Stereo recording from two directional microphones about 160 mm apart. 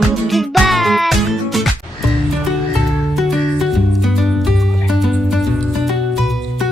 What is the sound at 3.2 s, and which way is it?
Music, centre (ahead or behind).